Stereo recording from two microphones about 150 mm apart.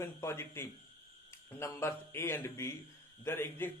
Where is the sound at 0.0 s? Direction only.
20° left (ahead or behind).